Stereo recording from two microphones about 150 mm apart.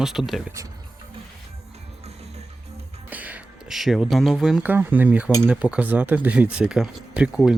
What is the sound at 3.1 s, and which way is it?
Speech, 10° right (ahead or behind).